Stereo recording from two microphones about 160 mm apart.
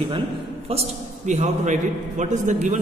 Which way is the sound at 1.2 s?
45° right (ahead or behind).